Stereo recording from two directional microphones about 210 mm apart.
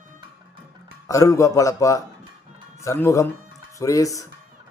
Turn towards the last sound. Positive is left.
turn(degrees=15)  # may be behind; listen again after turning